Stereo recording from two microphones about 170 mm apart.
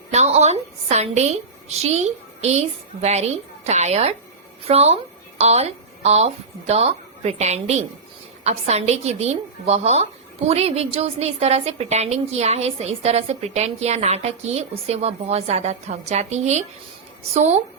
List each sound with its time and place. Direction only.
0.1 s a woman's voice: 40° right (ahead or behind)